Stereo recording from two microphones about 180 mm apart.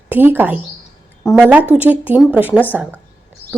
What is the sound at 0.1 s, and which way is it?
Speech, 10° right (ahead or behind).